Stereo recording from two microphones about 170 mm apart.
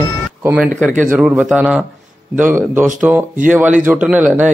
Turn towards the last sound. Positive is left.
turn(degrees=-10)  # may be behind; listen again after turning